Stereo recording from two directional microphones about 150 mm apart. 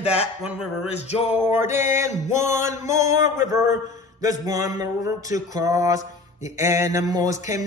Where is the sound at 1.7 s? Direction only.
50° left (ahead or behind).